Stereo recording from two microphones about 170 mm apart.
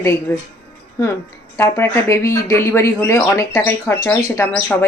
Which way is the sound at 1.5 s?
15° left (ahead or behind).